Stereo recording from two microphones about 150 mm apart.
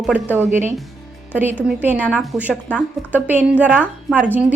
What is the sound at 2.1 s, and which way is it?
Speech, centre (ahead or behind).